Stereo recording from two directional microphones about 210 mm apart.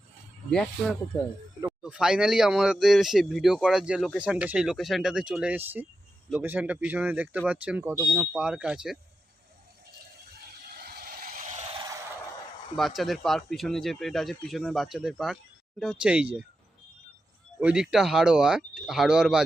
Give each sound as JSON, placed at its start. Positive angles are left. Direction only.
{"t": 1.8, "sound": "speech", "side_deg": -5}
{"t": 10.8, "sound": "vehicle", "side_deg": -50}
{"t": 12.7, "sound": "speech", "side_deg": 0}
{"t": 17.6, "sound": "speech", "side_deg": -5}